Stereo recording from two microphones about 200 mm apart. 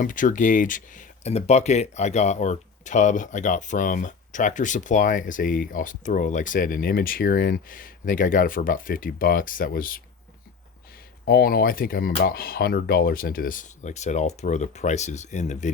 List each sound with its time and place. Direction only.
0.0 s speech: 40° left (ahead or behind)
11.3 s speech: 50° left (ahead or behind)